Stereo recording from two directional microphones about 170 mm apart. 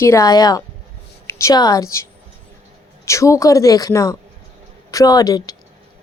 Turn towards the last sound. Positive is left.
turn(degrees=20)  # may be behind; listen again after turning